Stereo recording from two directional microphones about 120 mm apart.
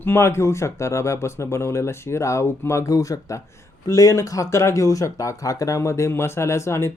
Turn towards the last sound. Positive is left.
turn(degrees=25)  # may be behind; listen again after turning